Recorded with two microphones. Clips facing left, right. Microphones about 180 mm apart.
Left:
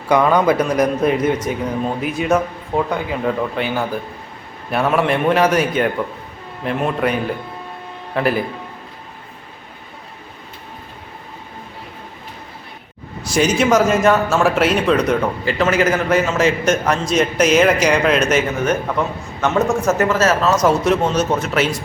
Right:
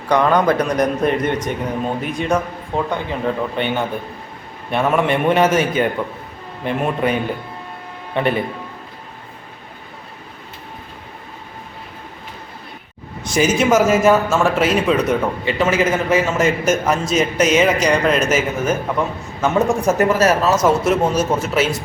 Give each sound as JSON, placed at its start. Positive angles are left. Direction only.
{"t": 0.1, "sound": "a man's voice", "side_deg": 10}
{"t": 13.2, "sound": "a man's voice", "side_deg": 0}